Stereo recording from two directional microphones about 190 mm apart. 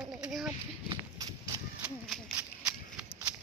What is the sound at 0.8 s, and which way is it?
Horse, 20° right (ahead or behind).